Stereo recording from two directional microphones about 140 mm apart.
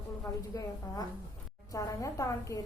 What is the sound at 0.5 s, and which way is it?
Speech, 25° left (ahead or behind).